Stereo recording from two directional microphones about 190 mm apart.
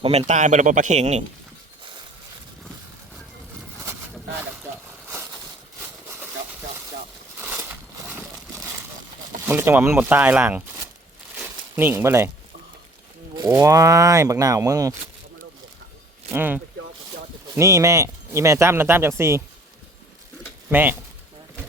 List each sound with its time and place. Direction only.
0.0 s speech: 35° right (ahead or behind)
6.1 s a sound: 10° right (ahead or behind)
9.5 s speech: 10° right (ahead or behind)
11.3 s a sound: 10° right (ahead or behind)
13.3 s speech: 20° right (ahead or behind)
16.3 s speech: 10° right (ahead or behind)
20.7 s speech: 10° right (ahead or behind)